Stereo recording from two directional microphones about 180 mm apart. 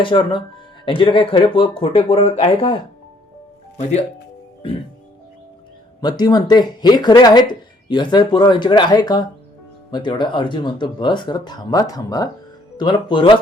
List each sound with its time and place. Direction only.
0.0 s speech: 30° left (ahead or behind)
6.0 s speech: 20° left (ahead or behind)